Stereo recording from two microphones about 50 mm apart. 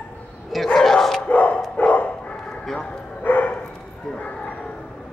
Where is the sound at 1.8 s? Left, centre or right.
Left.